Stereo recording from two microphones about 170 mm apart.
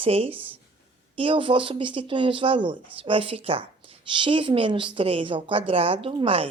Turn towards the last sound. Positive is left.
turn(degrees=-35)  # may be behind; listen again after turning